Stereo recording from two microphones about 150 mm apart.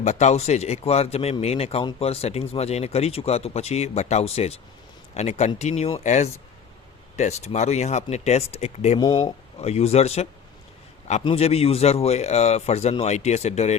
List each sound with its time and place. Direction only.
0.0 s speech: 50° left (ahead or behind)
9.0 s speech: 25° left (ahead or behind)
9.6 s speech: 45° left (ahead or behind)